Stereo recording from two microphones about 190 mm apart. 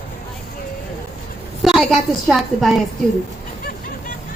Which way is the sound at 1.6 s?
Centre (ahead or behind).